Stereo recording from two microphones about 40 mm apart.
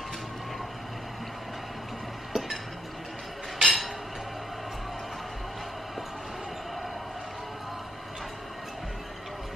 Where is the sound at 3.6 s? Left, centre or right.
Centre.